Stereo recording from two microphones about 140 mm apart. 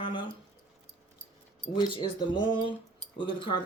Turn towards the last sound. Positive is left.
turn(degrees=35)  # may be behind; listen again after turning